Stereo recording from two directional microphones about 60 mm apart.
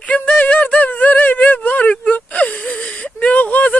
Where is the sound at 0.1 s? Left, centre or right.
Left.